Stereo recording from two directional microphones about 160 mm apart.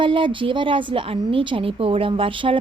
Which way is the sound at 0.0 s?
30° right (ahead or behind).